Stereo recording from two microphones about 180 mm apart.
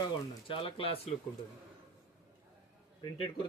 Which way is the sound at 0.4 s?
30° left (ahead or behind).